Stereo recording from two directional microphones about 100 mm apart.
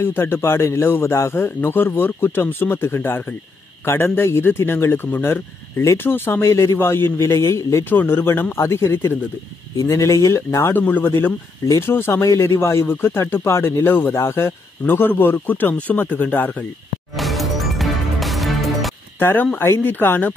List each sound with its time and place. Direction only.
0.0 s speech: 20° left (ahead or behind)
17.2 s music: centre (ahead or behind)
19.1 s speech: 20° left (ahead or behind)